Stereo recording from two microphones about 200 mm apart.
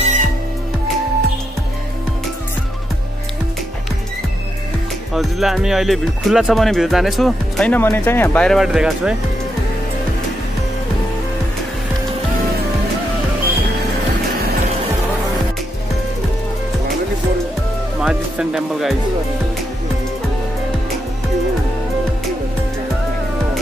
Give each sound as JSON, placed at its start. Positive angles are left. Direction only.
{"t": 0.0, "sound": "music", "side_deg": -35}
{"t": 5.1, "sound": "speech", "side_deg": 0}
{"t": 18.0, "sound": "music", "side_deg": -5}